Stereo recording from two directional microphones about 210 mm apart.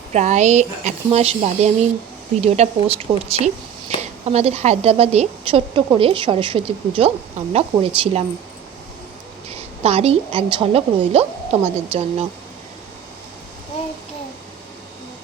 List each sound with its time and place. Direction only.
0.1 s a woman's voice: 35° right (ahead or behind)
9.8 s a woman's voice: 30° right (ahead or behind)